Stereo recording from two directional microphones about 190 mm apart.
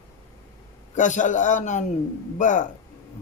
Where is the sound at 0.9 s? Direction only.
40° left (ahead or behind).